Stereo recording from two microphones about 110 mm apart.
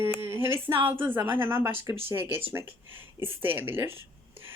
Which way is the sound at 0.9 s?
20° right (ahead or behind).